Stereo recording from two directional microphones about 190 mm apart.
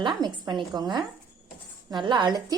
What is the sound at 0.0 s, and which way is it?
A woman's voice, 25° right (ahead or behind).